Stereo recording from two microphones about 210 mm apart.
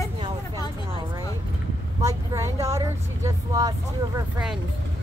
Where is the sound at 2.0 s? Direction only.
15° right (ahead or behind).